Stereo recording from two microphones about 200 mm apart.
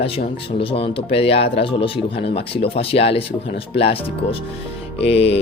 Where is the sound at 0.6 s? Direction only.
25° left (ahead or behind).